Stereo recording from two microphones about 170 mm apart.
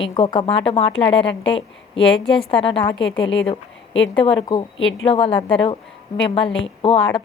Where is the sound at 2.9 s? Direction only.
90° left.